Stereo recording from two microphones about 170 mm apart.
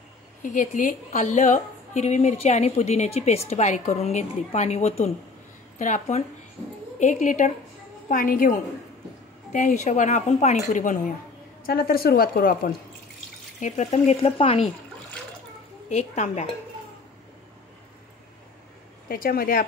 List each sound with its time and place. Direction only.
0.4 s a woman's voice: 50° left (ahead or behind)
11.6 s a woman's voice: 60° left (ahead or behind)
13.6 s speech: 45° left (ahead or behind)
13.8 s a woman's voice: 35° left (ahead or behind)
15.9 s a woman's voice: 40° left (ahead or behind)
19.0 s a woman's voice: 60° left (ahead or behind)